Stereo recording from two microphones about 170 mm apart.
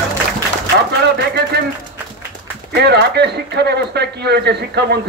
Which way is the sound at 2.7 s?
75° right (ahead or behind).